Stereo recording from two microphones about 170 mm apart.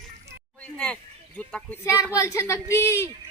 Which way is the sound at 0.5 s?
5° left (ahead or behind).